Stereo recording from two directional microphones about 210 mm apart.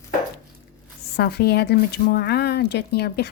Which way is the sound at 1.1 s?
50° left (ahead or behind).